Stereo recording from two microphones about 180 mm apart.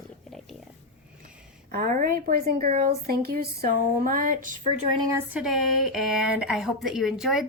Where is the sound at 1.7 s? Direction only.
50° right (ahead or behind).